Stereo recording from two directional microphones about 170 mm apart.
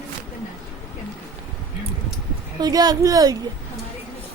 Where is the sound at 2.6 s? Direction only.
25° right (ahead or behind).